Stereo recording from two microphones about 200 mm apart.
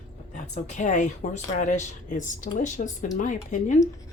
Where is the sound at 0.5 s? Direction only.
35° left (ahead or behind).